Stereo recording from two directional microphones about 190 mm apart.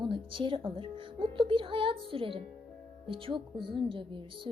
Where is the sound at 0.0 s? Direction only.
25° right (ahead or behind).